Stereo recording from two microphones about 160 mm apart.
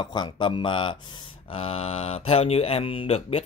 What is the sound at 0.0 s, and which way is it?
Speech, 25° left (ahead or behind).